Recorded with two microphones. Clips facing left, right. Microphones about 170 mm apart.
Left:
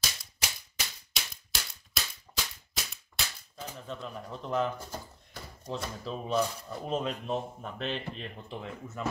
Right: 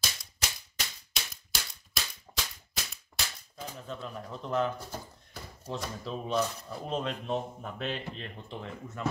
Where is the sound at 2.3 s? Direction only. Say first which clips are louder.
Even; 15° right (ahead or behind).